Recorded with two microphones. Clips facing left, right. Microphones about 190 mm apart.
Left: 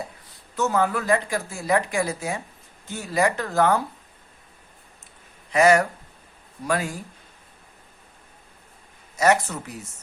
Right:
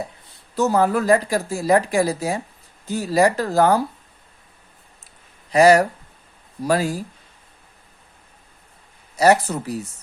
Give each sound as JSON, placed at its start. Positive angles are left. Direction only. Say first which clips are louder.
{"t": 0.5, "sound": "speech", "louder": "right 5 dB", "side_deg": -35}
{"t": 5.5, "sound": "speech", "louder": "right 4 dB", "side_deg": -35}
{"t": 9.1, "sound": "speech", "louder": "right 4 dB", "side_deg": -35}